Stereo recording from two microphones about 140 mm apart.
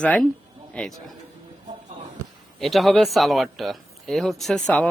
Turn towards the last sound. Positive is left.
turn(degrees=5)  # may be behind; listen again after turning